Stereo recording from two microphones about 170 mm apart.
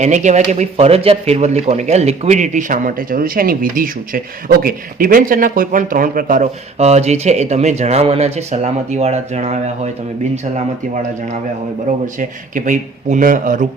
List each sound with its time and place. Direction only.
0.0 s speech: 45° right (ahead or behind)
12.0 s speech: 50° right (ahead or behind)